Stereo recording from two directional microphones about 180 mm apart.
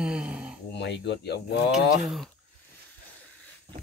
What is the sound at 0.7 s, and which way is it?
Speech, 70° left (ahead or behind).